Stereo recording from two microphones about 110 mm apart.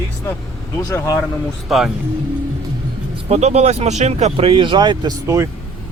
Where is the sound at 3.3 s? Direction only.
85° right; by 5.1 s 40° right (ahead or behind).